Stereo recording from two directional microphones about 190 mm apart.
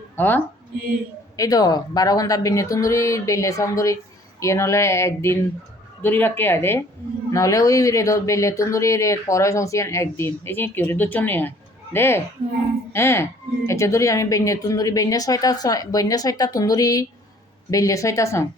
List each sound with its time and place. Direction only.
0.2 s a woman's voice: 10° left (ahead or behind)